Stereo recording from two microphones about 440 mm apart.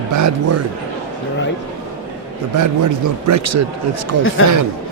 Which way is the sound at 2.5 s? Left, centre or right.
Right.